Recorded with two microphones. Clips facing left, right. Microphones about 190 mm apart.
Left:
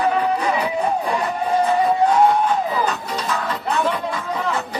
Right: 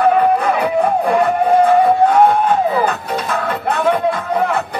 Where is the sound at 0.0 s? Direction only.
55° right (ahead or behind).